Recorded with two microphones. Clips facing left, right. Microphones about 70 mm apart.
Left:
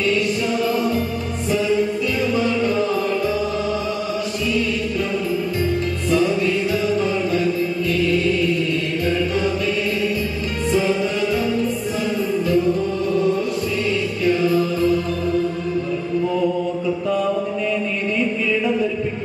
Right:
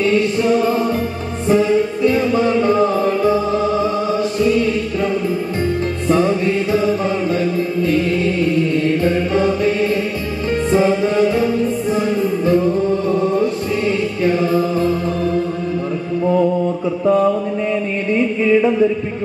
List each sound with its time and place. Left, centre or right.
0.0 s music: right
6.0 s music: right
7.8 s mantra: right
10.7 s music: right
13.4 s music: right
17.0 s mantra: right
18.1 s music: right